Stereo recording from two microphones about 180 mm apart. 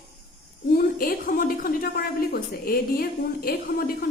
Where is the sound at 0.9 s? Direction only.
50° left (ahead or behind).